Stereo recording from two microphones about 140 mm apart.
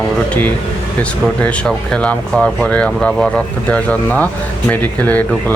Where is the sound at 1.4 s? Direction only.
5° left (ahead or behind).